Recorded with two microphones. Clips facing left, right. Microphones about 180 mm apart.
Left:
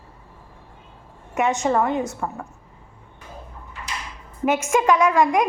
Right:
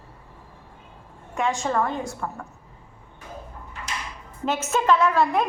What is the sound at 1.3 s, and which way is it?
Speech, 20° left (ahead or behind).